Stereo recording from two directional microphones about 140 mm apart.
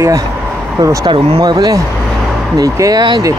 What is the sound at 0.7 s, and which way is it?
Speech, 25° right (ahead or behind).